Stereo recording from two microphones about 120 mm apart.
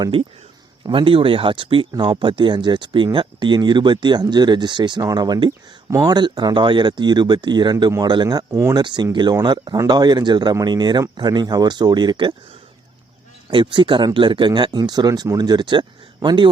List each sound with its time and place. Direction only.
0.0 s speech: 45° right (ahead or behind)
5.5 s speech: 25° right (ahead or behind)
6.1 s speech: 40° right (ahead or behind)
8.4 s speech: 25° right (ahead or behind)
8.8 s speech: 40° right (ahead or behind)
13.5 s speech: 40° right (ahead or behind)